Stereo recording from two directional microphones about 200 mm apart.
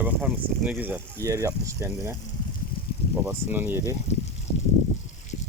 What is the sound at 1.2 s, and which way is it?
Speech, 15° right (ahead or behind).